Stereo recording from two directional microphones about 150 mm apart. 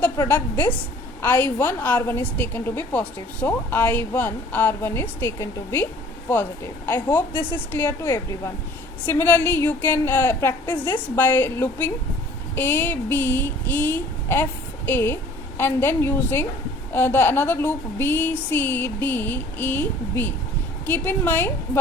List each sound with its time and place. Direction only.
0.0 s a woman's voice: 10° left (ahead or behind)